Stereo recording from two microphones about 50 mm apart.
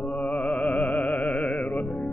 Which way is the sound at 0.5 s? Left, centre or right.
Left.